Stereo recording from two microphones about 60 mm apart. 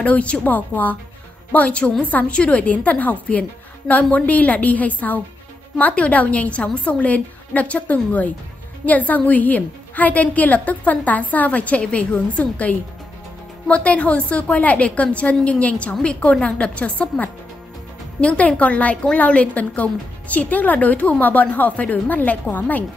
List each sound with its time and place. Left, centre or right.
0.0 s a woman's voice: left